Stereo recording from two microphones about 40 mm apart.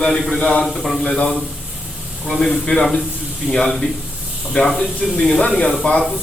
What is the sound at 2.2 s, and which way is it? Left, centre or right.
Speech, centre.